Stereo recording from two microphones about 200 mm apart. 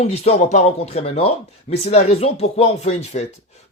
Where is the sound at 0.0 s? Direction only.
30° left (ahead or behind).